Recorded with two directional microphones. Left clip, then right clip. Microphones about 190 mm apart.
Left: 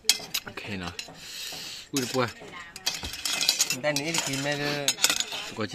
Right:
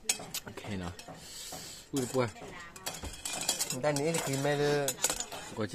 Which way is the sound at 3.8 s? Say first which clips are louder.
Left 3 dB; 35° right (ahead or behind).